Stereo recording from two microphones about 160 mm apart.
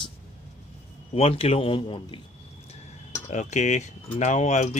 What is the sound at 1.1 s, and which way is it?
Speech, 40° left (ahead or behind).